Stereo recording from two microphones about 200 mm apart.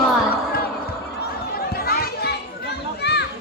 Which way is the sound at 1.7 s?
50° left (ahead or behind).